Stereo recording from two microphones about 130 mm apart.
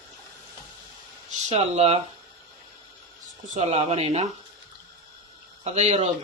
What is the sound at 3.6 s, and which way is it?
Speech, 55° right (ahead or behind).